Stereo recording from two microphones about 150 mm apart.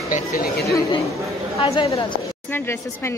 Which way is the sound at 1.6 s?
35° left (ahead or behind).